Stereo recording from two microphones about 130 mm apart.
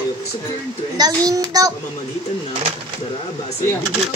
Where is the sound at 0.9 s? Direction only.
30° right (ahead or behind).